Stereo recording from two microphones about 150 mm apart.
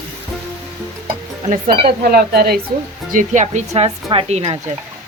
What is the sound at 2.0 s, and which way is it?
Speech, 85° right.